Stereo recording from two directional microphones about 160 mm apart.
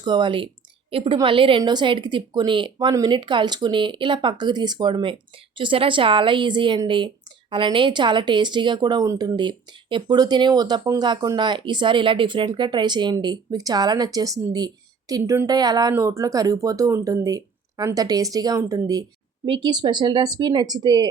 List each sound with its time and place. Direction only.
0.0 s a woman's voice: 30° right (ahead or behind)